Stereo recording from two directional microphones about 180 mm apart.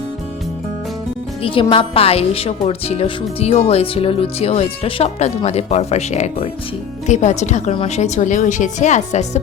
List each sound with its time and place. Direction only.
1.4 s speech: 30° left (ahead or behind)